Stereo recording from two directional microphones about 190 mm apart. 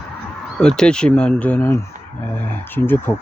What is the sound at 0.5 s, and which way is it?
Speech, 5° left (ahead or behind).